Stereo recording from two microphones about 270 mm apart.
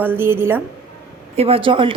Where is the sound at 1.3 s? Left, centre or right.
Right.